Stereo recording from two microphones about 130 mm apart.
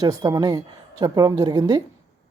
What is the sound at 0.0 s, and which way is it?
Speech, 30° right (ahead or behind).